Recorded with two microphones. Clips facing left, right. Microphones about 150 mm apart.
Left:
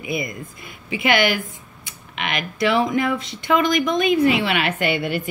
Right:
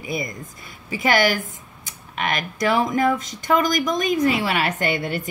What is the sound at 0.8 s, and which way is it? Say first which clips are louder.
A woman's voice: even; 40° right (ahead or behind).